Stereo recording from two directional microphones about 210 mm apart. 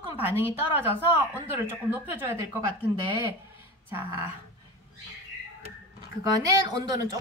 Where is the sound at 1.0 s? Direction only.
10° right (ahead or behind).